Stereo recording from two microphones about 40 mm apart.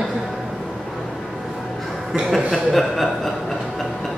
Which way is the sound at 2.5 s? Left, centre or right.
Centre.